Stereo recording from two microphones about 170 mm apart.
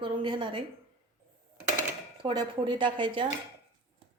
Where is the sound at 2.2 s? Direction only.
30° right (ahead or behind).